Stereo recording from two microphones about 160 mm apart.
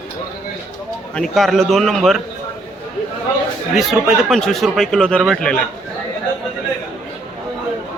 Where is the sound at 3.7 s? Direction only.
Centre (ahead or behind).